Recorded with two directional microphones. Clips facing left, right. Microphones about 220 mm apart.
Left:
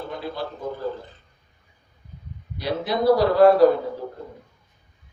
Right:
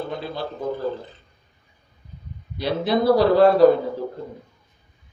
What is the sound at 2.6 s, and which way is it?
Speech, 25° right (ahead or behind).